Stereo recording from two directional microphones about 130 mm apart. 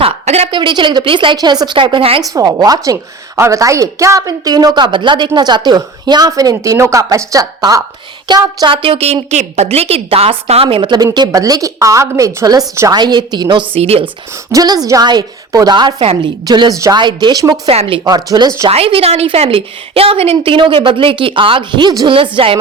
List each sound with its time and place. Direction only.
0.0 s a sound: 50° right (ahead or behind)
0.5 s a woman's voice: 35° right (ahead or behind)
2.3 s a woman's voice: 30° right (ahead or behind); by 9.1 s 50° right (ahead or behind)
9.3 s a woman's voice: 60° right (ahead or behind)
14.5 s a woman's voice: 30° right (ahead or behind)
17.7 s a woman's voice: 45° right (ahead or behind)
18.1 s a woman's voice: 30° right (ahead or behind)
18.7 s a woman's voice: 50° right (ahead or behind)